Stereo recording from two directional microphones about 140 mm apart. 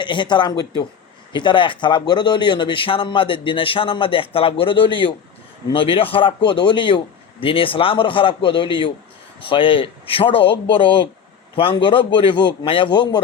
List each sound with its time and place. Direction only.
0.0 s speech: 35° left (ahead or behind)